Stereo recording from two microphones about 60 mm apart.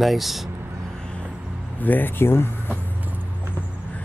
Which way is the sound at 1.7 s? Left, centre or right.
Left.